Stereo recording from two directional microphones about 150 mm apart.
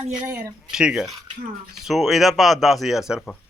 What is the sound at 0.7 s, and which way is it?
Speech, 5° right (ahead or behind).